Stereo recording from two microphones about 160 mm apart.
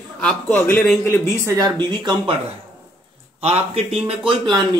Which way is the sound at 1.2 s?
20° right (ahead or behind).